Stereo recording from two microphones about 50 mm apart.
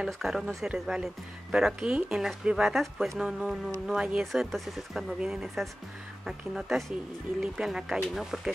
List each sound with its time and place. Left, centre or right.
0.0 s speech: centre
4.2 s speech: centre